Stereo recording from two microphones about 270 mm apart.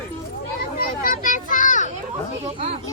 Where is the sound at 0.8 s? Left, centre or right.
Left.